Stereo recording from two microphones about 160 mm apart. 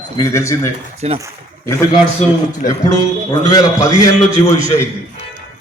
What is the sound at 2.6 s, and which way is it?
Speech, 60° left (ahead or behind).